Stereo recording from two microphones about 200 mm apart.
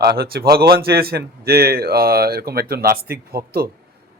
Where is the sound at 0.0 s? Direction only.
55° right (ahead or behind).